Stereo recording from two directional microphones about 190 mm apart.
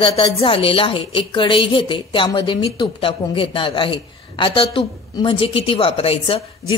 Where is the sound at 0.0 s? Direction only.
30° left (ahead or behind).